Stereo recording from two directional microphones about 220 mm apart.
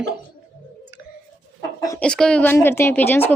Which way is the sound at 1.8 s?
10° left (ahead or behind).